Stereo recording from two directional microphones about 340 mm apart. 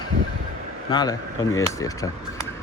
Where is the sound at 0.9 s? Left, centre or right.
Centre.